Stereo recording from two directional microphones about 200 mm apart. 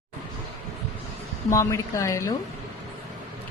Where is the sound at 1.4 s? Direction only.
15° left (ahead or behind).